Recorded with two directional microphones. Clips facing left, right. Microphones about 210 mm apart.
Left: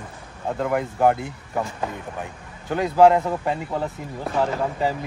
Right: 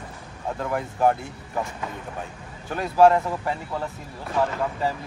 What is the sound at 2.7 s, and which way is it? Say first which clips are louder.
Speech: left 2 dB; 15° left (ahead or behind).